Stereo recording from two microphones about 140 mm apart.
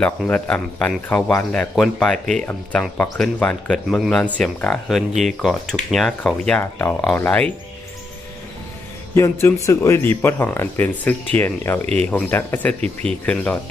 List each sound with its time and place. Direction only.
0.0 s speech: 10° left (ahead or behind)
9.1 s speech: 20° left (ahead or behind)